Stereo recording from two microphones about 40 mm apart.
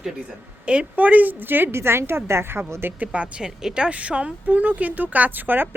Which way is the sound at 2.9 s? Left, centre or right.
Right.